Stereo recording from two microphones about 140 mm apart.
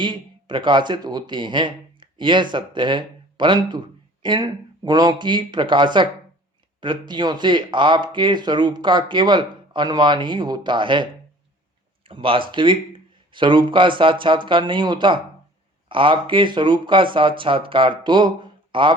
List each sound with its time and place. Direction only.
0.0 s speech: 35° right (ahead or behind)